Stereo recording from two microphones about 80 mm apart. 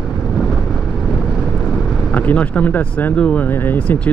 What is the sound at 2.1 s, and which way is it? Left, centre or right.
Speech, centre.